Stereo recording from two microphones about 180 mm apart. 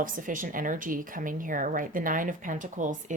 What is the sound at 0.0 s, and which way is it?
A woman's voice, 50° right (ahead or behind).